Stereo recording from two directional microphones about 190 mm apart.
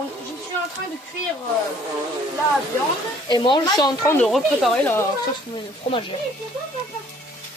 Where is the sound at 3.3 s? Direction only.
25° left (ahead or behind).